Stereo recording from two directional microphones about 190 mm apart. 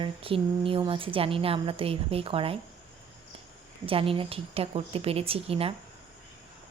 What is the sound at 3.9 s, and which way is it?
A woman's voice, 30° right (ahead or behind).